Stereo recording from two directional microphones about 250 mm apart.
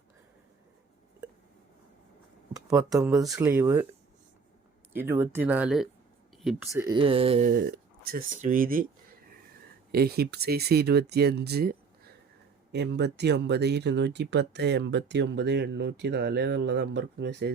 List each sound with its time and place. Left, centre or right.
2.6 s a sound: centre
2.9 s speech: centre
4.9 s speech: centre
6.8 s speech: centre
7.4 s speech: right
9.9 s speech: right